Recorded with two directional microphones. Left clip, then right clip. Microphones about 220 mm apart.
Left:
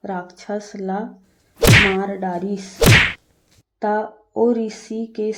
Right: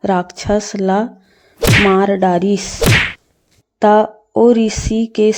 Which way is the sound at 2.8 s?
Centre (ahead or behind).